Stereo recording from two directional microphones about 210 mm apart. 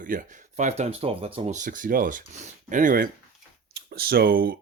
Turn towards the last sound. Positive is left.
turn(degrees=-45)  # may be behind; listen again after turning